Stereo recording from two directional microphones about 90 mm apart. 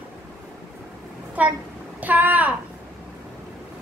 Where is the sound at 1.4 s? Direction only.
15° right (ahead or behind).